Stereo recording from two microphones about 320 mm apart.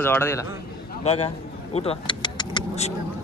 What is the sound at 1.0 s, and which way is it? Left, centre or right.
Vehicle, centre.